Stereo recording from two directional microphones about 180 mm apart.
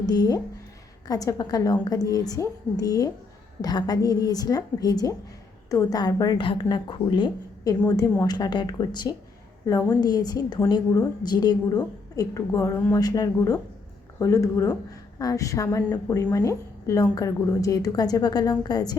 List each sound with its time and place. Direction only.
0.0 s a woman's voice: 20° left (ahead or behind)